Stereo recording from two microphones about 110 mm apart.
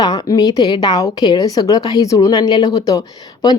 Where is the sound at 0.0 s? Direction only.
35° left (ahead or behind).